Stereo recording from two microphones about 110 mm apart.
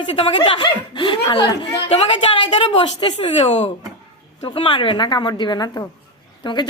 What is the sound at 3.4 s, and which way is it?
A woman's voice, 60° left (ahead or behind).